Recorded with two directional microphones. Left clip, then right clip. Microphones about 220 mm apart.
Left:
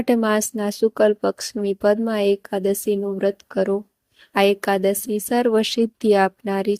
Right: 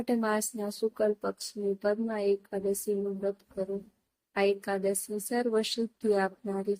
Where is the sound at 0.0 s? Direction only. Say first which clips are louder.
Left 10 dB; 35° left (ahead or behind).